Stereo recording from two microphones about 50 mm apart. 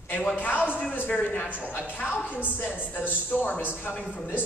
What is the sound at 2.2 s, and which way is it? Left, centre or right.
Speech, left.